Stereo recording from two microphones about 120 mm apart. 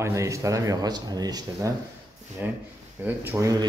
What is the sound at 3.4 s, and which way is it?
Speech, 30° right (ahead or behind).